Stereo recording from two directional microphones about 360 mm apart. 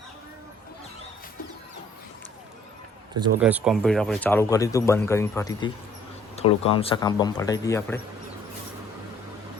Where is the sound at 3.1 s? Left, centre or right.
Centre.